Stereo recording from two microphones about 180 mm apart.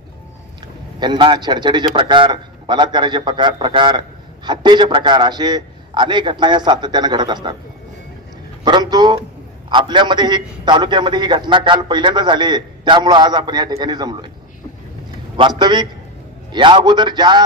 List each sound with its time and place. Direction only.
0.9 s a man's voice: 25° right (ahead or behind)
8.6 s a man's voice: 25° right (ahead or behind)
15.3 s a man's voice: 25° right (ahead or behind)